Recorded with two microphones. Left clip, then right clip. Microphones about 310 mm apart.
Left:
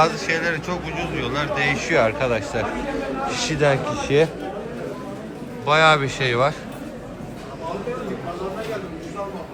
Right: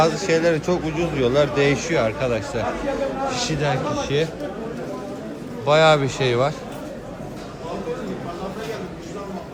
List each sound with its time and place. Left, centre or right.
0.0 s a man's voice: centre
5.6 s a man's voice: centre